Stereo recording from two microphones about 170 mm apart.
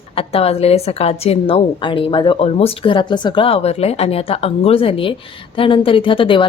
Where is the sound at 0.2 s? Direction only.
35° left (ahead or behind).